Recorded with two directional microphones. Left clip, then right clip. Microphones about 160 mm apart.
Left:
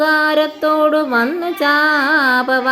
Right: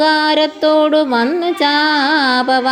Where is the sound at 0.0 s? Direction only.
15° right (ahead or behind).